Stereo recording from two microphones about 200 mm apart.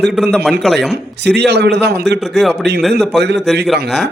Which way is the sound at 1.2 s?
55° right (ahead or behind).